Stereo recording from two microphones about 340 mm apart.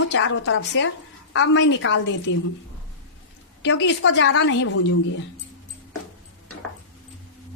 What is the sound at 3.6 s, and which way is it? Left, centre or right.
A woman's voice, left.